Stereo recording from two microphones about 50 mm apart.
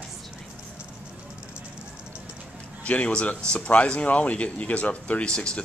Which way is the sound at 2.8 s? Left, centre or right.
Left.